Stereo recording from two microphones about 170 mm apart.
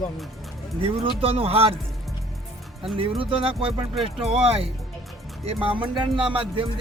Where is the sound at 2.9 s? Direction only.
30° right (ahead or behind).